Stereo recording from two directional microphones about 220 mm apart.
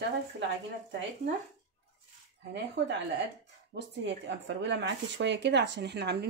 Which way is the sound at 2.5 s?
50° right (ahead or behind).